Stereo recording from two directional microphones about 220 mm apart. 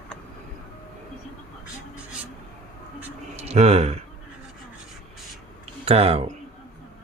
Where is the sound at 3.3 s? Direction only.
30° right (ahead or behind).